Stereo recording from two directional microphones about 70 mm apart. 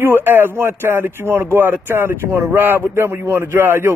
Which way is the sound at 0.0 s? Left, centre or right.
Right.